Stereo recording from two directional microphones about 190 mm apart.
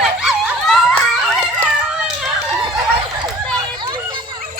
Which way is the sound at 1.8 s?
5° right (ahead or behind).